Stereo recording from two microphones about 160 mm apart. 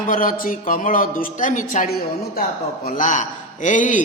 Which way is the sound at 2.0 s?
70° left (ahead or behind).